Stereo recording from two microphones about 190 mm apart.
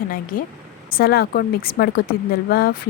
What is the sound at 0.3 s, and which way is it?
Speech, 45° left (ahead or behind).